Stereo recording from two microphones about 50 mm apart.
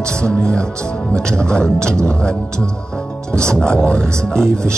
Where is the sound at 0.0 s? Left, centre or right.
Centre.